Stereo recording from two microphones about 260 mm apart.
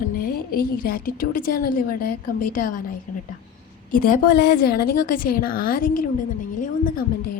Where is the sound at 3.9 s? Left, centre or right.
Left.